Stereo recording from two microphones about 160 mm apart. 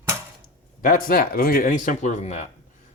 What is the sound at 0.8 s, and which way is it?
Speech, 65° left (ahead or behind).